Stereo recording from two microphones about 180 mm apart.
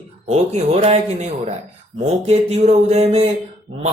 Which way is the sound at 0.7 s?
35° right (ahead or behind).